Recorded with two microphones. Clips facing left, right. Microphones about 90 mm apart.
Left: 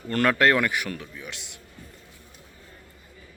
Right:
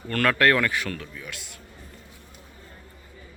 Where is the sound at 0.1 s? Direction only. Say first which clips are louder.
Even; 20° left (ahead or behind).